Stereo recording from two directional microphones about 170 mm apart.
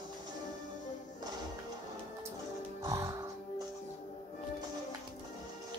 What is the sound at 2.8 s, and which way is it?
Music, 20° right (ahead or behind).